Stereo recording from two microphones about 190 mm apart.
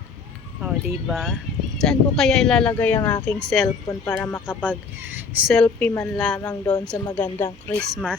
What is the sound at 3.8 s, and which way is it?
Speech, 20° left (ahead or behind).